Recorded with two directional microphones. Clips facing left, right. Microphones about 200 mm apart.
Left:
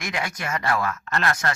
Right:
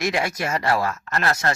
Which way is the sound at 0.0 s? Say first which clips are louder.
Right 6 dB; 25° right (ahead or behind).